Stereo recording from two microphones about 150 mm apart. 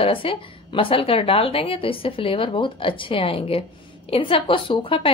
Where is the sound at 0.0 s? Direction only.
35° left (ahead or behind).